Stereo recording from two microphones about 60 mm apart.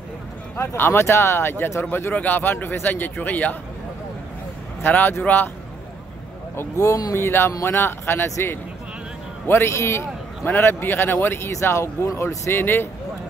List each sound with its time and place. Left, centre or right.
0.6 s speech: left
4.8 s speech: left
6.5 s speech: left
7.2 s speech: left
10.6 s speech: left
12.4 s speech: left